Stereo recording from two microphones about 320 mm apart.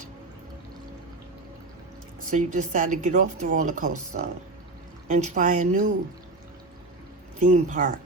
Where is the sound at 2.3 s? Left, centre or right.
Right.